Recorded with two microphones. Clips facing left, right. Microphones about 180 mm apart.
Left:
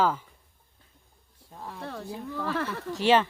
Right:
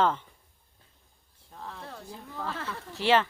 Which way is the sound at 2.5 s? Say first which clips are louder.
Left 7 dB; 65° left (ahead or behind).